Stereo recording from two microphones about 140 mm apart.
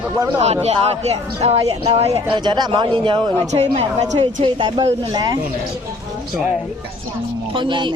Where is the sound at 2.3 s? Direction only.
30° right (ahead or behind).